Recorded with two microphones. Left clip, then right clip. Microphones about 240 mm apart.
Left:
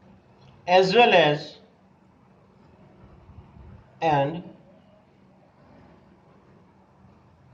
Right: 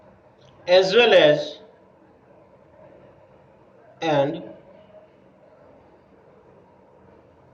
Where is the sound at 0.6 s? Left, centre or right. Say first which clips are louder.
Right 1 dB; centre.